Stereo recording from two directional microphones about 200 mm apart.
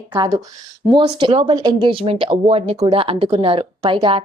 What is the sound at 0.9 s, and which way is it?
A woman's voice, 25° right (ahead or behind).